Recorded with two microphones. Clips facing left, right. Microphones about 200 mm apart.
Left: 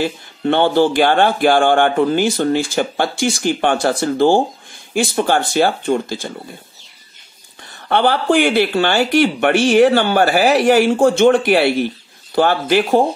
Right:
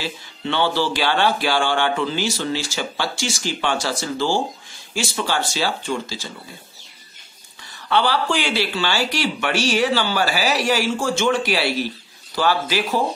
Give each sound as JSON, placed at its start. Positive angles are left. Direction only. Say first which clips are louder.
{"t": 0.0, "sound": "speech", "louder": "left 9 dB", "side_deg": 55}
{"t": 7.9, "sound": "speech", "louder": "left 6 dB", "side_deg": 55}